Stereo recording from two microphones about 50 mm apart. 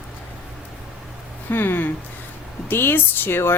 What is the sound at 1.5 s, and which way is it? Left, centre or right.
A woman's voice, left.